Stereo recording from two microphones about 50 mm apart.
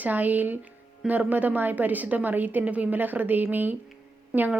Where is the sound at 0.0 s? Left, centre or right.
Right.